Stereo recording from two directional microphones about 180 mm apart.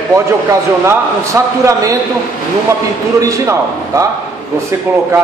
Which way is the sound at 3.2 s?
20° right (ahead or behind).